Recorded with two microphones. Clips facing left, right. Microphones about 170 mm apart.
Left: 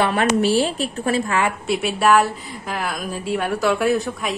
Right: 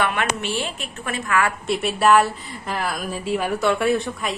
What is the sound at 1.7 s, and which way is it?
A woman's voice, centre (ahead or behind).